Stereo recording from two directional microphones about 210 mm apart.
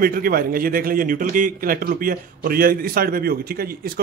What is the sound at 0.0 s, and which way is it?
A man's voice, 45° right (ahead or behind).